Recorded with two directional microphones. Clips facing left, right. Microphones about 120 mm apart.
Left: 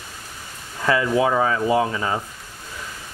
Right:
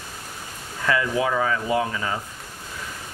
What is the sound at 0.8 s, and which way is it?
Speech, 25° left (ahead or behind).